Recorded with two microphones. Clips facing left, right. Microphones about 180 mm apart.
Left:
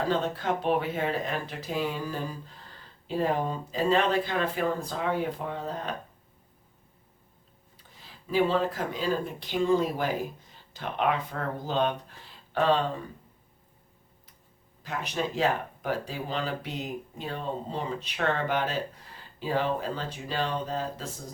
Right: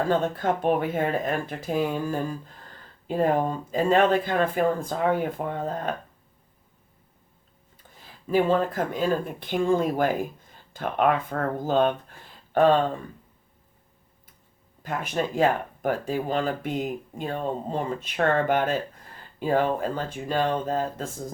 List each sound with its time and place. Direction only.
0.1 s speech: 50° right (ahead or behind)
7.9 s speech: 50° right (ahead or behind)
14.8 s speech: 50° right (ahead or behind)